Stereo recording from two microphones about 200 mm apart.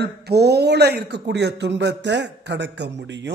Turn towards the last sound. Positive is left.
turn(degrees=-65)  # may be behind; listen again after turning